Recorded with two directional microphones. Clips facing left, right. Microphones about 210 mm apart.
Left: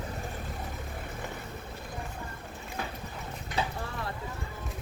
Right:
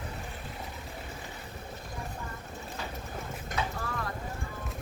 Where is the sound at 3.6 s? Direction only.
30° left (ahead or behind).